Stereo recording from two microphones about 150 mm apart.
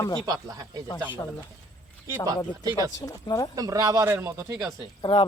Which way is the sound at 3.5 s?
25° right (ahead or behind).